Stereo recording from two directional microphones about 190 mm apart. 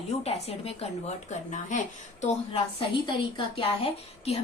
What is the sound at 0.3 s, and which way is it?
Speech, 35° left (ahead or behind).